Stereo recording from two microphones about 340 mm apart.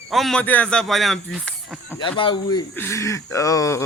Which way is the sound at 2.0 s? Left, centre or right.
Centre.